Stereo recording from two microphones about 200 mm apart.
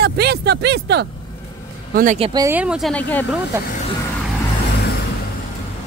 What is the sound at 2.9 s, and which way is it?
Speech, 10° left (ahead or behind).